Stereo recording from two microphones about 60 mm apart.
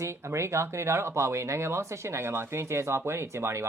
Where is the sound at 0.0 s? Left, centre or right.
Right.